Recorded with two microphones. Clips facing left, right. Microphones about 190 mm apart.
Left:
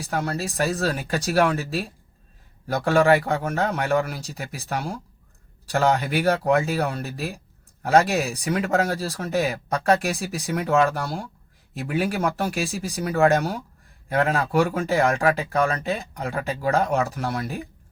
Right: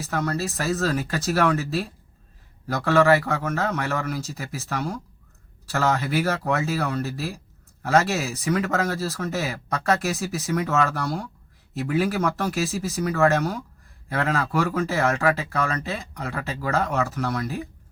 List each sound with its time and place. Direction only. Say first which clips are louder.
0.0 s speech: right 1 dB; 15° left (ahead or behind)